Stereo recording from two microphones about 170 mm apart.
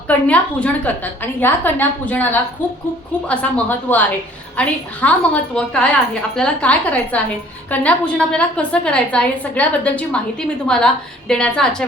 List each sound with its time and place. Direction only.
0.1 s a woman's voice: 10° left (ahead or behind)